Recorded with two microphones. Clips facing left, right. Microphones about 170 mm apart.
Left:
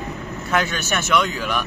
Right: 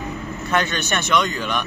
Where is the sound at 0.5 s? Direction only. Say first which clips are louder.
Even; 5° left (ahead or behind).